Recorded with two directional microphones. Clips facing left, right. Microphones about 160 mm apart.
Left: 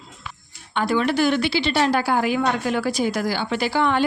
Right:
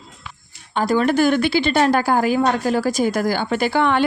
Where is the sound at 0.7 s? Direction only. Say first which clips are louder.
Right 3 dB; 40° right (ahead or behind).